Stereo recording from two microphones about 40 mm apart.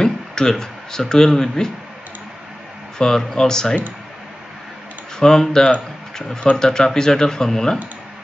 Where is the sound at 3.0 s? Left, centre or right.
Centre.